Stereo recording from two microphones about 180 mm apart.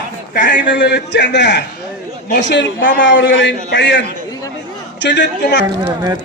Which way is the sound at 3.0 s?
90° left.